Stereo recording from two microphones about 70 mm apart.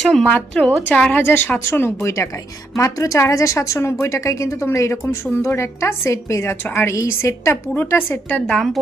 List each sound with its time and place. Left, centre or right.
0.0 s speech: centre
0.3 s speech: centre
1.1 s a woman's voice: left
2.7 s a woman's voice: left
5.0 s a woman's voice: left
8.3 s a woman's voice: centre